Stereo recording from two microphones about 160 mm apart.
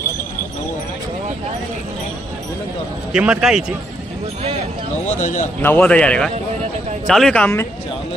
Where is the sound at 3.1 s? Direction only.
5° right (ahead or behind).